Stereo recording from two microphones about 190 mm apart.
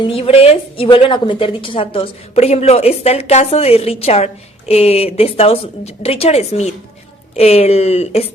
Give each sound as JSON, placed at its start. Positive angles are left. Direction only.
{"t": 0.0, "sound": "speech", "side_deg": 30}